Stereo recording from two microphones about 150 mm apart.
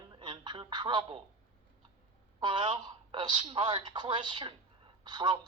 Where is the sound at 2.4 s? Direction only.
30° right (ahead or behind).